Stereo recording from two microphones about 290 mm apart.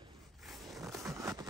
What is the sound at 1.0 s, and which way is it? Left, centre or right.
Vehicle, centre.